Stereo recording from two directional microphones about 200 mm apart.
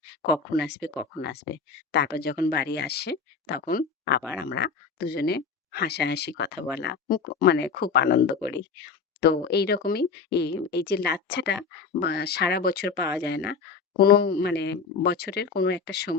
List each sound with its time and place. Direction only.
0.5 s speech: 55° left (ahead or behind)
1.9 s speech: 55° left (ahead or behind)